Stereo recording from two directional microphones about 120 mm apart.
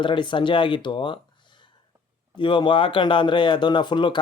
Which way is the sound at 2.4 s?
40° left (ahead or behind).